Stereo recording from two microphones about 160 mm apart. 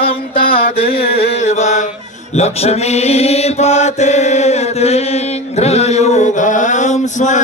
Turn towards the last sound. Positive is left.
turn(degrees=50)  # may be behind; listen again after turning